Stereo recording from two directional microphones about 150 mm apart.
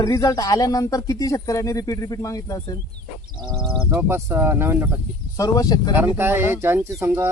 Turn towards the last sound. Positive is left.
turn(degrees=-15)  # may be behind; listen again after turning